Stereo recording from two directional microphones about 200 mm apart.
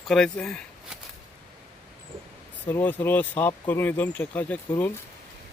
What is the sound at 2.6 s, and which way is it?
Speech, 10° left (ahead or behind).